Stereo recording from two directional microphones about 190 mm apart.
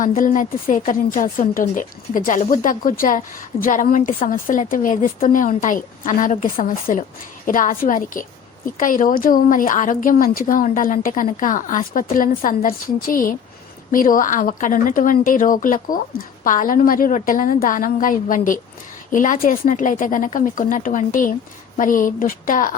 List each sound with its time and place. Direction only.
0.0 s speech: 45° left (ahead or behind)